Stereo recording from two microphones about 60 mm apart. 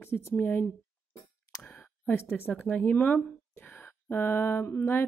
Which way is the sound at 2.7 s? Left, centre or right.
Left.